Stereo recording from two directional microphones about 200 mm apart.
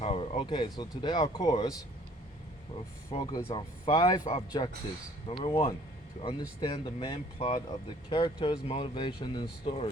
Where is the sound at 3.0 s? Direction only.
30° left (ahead or behind).